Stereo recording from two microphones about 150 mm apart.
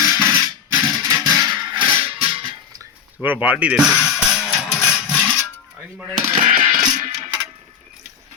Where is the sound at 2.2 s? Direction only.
30° right (ahead or behind).